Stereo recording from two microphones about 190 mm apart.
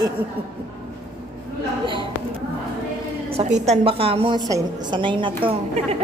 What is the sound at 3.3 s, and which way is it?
A woman's voice, 35° right (ahead or behind).